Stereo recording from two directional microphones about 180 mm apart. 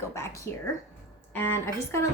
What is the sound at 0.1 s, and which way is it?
A woman's voice, 15° left (ahead or behind).